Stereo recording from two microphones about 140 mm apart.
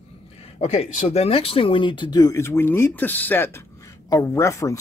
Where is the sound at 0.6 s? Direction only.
50° left (ahead or behind).